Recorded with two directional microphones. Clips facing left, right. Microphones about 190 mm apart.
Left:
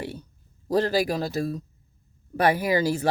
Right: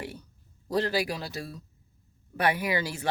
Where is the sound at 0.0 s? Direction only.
30° left (ahead or behind).